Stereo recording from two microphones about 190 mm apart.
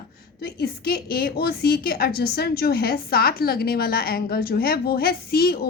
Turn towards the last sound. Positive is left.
turn(degrees=55)  # may be behind; listen again after turning